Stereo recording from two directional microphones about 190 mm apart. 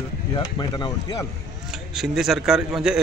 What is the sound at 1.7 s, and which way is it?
Speech, centre (ahead or behind).